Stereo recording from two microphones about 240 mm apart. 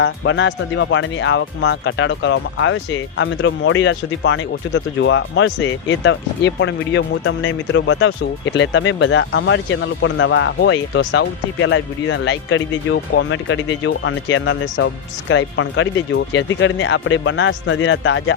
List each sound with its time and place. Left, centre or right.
0.0 s speech: left